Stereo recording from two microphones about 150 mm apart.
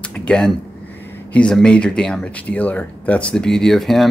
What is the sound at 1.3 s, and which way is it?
Speech, 5° left (ahead or behind).